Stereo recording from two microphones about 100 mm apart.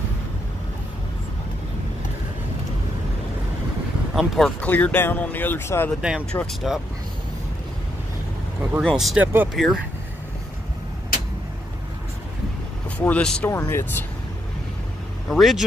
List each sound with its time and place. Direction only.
4.1 s speech: centre (ahead or behind)
4.6 s speech: 15° left (ahead or behind)
5.9 s speech: 10° right (ahead or behind)
8.9 s speech: 5° right (ahead or behind)
9.2 s speech: 20° right (ahead or behind)
9.5 s speech: 5° right (ahead or behind)
12.9 s speech: 15° left (ahead or behind)
13.5 s speech: 25° left (ahead or behind)
15.2 s speech: centre (ahead or behind)